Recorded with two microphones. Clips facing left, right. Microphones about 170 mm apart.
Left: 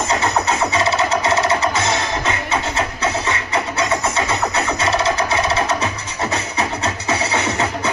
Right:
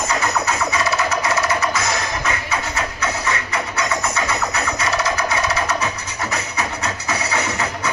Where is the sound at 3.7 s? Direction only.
30° left (ahead or behind).